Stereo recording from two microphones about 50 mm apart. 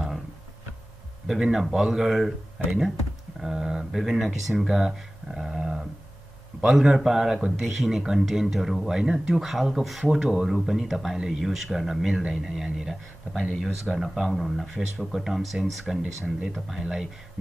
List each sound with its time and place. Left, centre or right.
1.2 s speech: centre
5.3 s speech: centre